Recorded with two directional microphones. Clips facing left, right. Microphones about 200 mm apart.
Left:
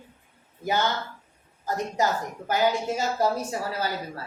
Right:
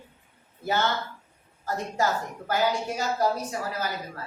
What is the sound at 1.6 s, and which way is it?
A woman's voice, 20° left (ahead or behind).